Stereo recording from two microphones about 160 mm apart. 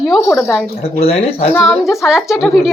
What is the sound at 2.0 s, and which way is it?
Speech, 5° right (ahead or behind).